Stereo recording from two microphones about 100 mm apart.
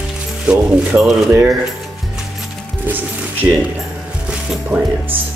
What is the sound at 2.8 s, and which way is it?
Music, 20° right (ahead or behind).